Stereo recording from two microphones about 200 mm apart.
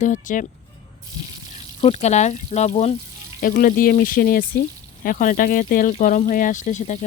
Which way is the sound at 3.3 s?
45° left (ahead or behind).